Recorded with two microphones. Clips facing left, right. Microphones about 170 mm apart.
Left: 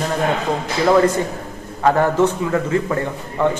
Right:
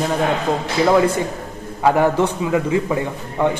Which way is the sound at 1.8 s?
10° right (ahead or behind).